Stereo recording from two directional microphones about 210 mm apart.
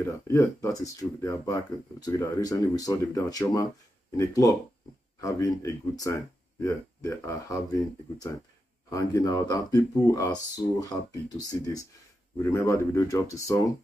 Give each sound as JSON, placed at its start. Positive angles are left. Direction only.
{"t": 0.0, "sound": "speech", "side_deg": 15}
{"t": 8.9, "sound": "speech", "side_deg": 15}